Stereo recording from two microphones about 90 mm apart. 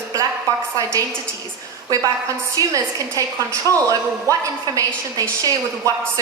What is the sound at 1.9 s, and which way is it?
A man's voice, 40° right (ahead or behind).